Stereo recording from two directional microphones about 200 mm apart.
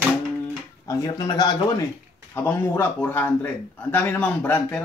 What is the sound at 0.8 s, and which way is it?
A man's voice, 20° left (ahead or behind).